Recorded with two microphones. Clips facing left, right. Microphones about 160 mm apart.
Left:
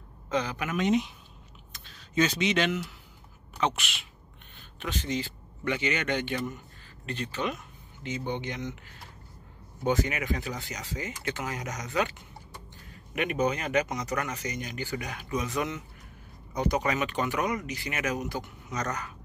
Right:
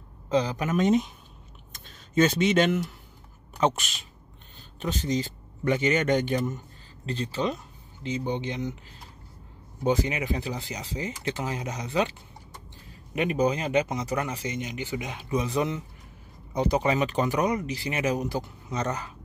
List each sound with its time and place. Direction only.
0.3 s speech: 35° right (ahead or behind)
7.1 s speech: 30° right (ahead or behind)
9.8 s speech: 30° right (ahead or behind)